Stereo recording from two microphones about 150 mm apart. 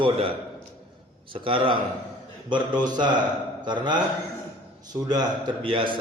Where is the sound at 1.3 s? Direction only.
35° right (ahead or behind).